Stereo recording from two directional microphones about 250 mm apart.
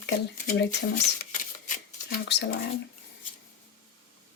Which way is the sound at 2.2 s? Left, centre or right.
Left.